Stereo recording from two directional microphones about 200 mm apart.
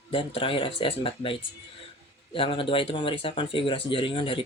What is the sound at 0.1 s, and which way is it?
Speech, 25° left (ahead or behind).